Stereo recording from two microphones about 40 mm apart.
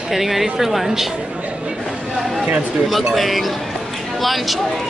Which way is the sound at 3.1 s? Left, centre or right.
Centre.